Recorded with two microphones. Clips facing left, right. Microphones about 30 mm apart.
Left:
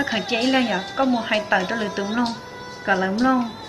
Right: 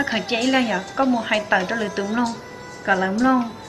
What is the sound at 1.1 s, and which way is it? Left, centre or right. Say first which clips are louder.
Speech: right 1 dB; left.